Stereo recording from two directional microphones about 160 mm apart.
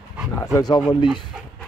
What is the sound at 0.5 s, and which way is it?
Speech, 25° left (ahead or behind).